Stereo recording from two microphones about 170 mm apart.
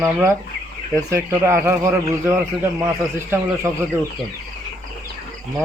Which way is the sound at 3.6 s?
20° right (ahead or behind).